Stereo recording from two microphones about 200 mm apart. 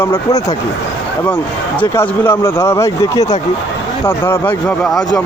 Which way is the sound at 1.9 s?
10° left (ahead or behind).